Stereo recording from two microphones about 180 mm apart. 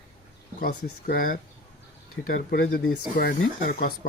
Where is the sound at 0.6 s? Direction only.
55° left (ahead or behind).